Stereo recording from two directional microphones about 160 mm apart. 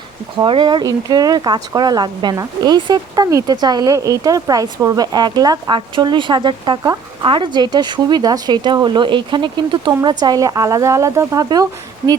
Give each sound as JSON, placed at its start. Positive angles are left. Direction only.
{"t": 0.3, "sound": "speech", "side_deg": -30}